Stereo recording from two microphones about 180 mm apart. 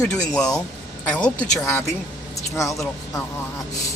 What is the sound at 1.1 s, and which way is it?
Speech, 5° left (ahead or behind).